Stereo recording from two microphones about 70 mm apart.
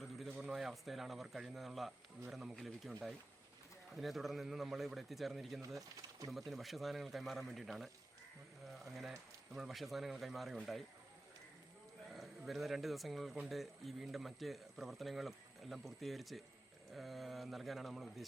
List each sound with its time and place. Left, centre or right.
0.0 s a sound: centre
0.4 s speech: centre
3.9 s speech: centre
6.0 s a sound: right
6.3 s speech: centre
12.5 s speech: centre